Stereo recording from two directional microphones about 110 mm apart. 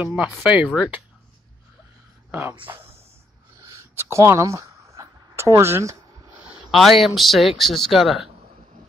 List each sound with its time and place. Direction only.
0.0 s speech: 10° right (ahead or behind)
2.7 s speech: 30° right (ahead or behind)
3.6 s a sound: 25° right (ahead or behind)
6.7 s speech: centre (ahead or behind)